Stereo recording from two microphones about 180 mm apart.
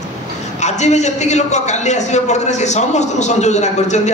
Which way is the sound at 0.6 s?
40° left (ahead or behind).